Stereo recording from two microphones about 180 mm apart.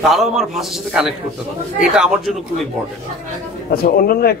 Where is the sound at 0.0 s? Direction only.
Centre (ahead or behind).